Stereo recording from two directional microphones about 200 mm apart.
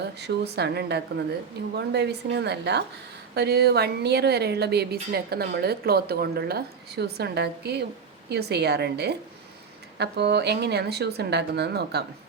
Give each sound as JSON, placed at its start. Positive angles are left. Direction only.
{"t": 0.0, "sound": "a woman's voice", "side_deg": -55}